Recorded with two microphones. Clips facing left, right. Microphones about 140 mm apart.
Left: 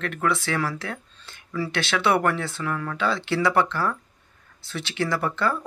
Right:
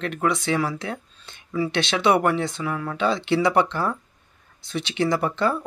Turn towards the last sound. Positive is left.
turn(degrees=-20)  # may be behind; listen again after turning